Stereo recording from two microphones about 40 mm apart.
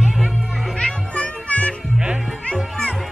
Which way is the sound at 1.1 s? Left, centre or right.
Left.